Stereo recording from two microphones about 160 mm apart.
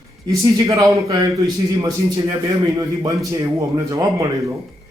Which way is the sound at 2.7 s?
25° right (ahead or behind).